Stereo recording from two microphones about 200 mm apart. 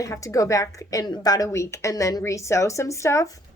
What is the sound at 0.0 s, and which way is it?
A woman's voice, 15° left (ahead or behind).